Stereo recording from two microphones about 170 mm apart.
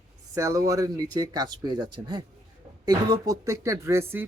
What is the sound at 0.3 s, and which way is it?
Speech, 20° right (ahead or behind).